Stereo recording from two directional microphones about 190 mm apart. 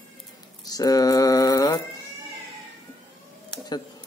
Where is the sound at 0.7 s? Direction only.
20° left (ahead or behind).